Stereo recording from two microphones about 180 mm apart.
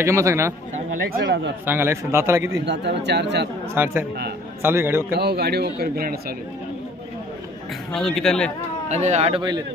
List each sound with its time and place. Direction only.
0.0 s a man's voice: 15° right (ahead or behind)
1.2 s speech: 75° right (ahead or behind)
1.7 s a man's voice: 15° right (ahead or behind)
2.6 s speech: 70° right (ahead or behind)
3.7 s a man's voice: 10° right (ahead or behind)
5.1 s a man's voice: 65° right (ahead or behind)
7.9 s a man's voice: 5° left (ahead or behind)
8.8 s speech: 40° right (ahead or behind)